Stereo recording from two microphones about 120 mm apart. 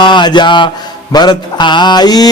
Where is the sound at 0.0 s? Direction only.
40° left (ahead or behind).